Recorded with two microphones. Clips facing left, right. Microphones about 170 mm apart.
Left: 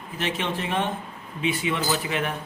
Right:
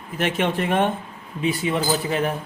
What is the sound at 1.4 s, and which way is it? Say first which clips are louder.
Speech: right 3 dB; 40° right (ahead or behind).